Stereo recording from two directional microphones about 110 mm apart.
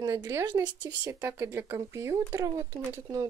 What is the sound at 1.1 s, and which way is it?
Speech, 25° right (ahead or behind).